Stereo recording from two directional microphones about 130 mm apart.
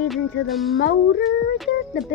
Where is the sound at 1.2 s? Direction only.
Centre (ahead or behind).